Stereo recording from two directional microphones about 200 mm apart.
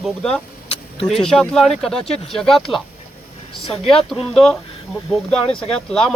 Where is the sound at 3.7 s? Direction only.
25° left (ahead or behind).